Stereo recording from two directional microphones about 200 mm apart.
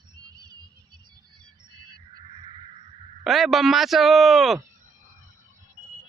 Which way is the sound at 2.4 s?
25° right (ahead or behind).